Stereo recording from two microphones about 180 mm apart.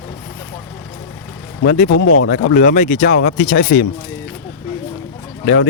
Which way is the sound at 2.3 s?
60° left (ahead or behind).